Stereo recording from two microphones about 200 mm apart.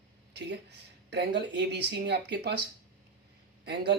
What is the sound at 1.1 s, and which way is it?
Speech, 60° right (ahead or behind).